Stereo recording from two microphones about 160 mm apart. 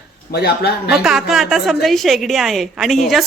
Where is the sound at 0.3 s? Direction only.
90° left.